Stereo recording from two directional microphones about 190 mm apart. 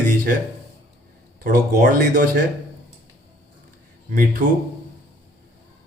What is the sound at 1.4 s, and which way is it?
Speech, 45° right (ahead or behind).